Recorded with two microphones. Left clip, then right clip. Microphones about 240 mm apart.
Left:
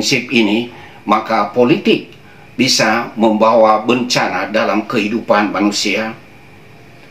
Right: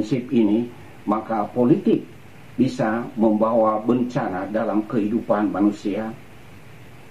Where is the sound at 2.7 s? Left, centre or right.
Centre.